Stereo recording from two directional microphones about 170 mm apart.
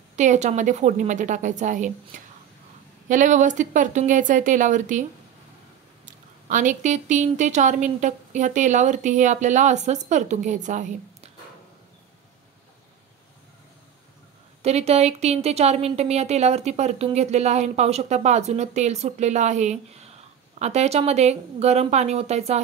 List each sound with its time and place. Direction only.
0.1 s speech: 45° right (ahead or behind)
6.0 s speech: 50° right (ahead or behind)
14.6 s speech: 40° right (ahead or behind)